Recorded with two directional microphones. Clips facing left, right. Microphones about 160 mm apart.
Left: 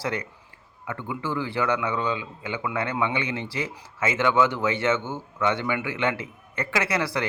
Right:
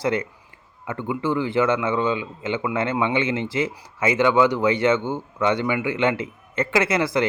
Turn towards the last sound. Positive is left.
turn(degrees=-20)  # may be behind; listen again after turning